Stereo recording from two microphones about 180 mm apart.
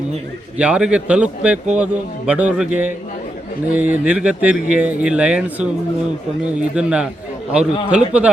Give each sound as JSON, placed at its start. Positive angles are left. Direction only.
{"t": 0.6, "sound": "a man's voice", "side_deg": -5}